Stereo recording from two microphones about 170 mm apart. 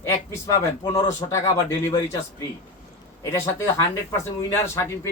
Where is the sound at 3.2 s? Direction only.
15° left (ahead or behind).